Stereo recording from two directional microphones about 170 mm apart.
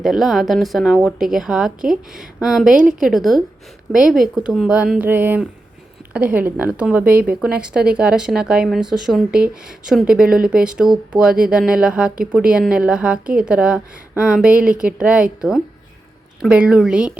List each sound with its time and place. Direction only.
0.0 s a woman's voice: centre (ahead or behind)
7.0 s speech: 60° right (ahead or behind)
7.4 s a woman's voice: 5° right (ahead or behind)